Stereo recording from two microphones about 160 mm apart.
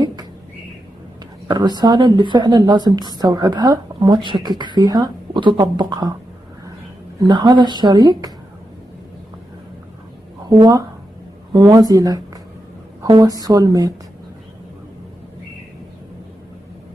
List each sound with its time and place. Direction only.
0.0 s a sound: 25° right (ahead or behind)
1.5 s a woman's voice: 25° right (ahead or behind)
7.2 s a woman's voice: 25° right (ahead or behind)
11.5 s a woman's voice: 25° right (ahead or behind)